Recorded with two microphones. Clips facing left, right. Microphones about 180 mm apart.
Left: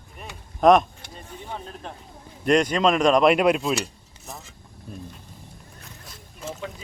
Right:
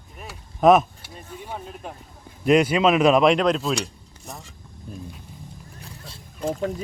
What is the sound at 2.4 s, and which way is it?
Speech, 5° right (ahead or behind).